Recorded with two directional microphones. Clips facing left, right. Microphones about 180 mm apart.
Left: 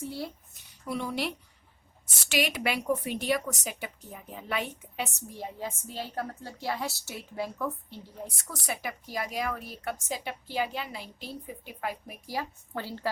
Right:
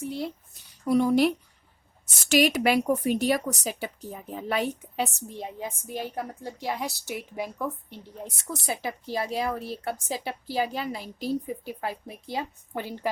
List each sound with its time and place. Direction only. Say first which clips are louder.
0.0 s a woman's voice: right 4 dB; 20° right (ahead or behind)
0.9 s speech: right 11 dB; 45° right (ahead or behind)
2.3 s a woman's voice: right 8 dB; 40° right (ahead or behind)
5.3 s a woman's voice: right 2 dB; 20° right (ahead or behind)